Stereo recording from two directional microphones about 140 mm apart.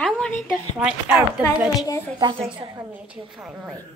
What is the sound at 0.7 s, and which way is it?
Speech, 10° right (ahead or behind).